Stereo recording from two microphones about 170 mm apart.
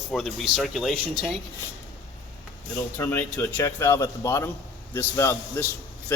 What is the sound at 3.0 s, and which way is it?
Speech, 10° left (ahead or behind).